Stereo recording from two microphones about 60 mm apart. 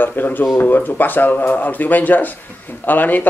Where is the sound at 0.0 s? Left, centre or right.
Left.